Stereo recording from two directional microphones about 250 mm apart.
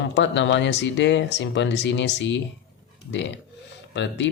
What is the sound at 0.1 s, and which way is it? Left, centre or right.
Speech, left.